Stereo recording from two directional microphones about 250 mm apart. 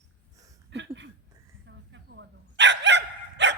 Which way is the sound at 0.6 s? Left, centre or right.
Right.